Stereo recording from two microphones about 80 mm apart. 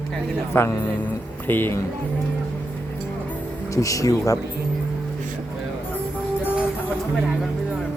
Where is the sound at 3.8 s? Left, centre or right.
Left.